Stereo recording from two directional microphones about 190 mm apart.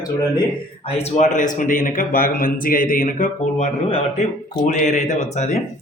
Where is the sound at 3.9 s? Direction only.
30° left (ahead or behind).